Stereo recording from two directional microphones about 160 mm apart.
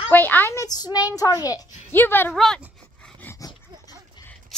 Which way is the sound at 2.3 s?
Centre (ahead or behind).